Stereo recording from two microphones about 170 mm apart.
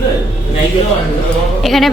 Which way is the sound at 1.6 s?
Centre (ahead or behind).